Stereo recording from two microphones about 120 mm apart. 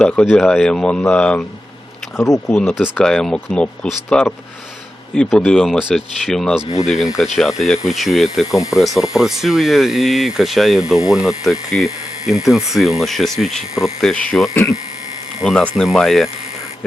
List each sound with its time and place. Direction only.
0.0 s speech: 10° left (ahead or behind)
2.1 s speech: 25° left (ahead or behind)
2.9 s speech: 5° left (ahead or behind)
14.5 s speech: 20° left (ahead or behind)
15.4 s speech: centre (ahead or behind)